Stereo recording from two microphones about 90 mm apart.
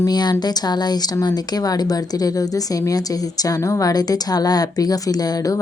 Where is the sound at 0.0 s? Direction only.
50° left (ahead or behind).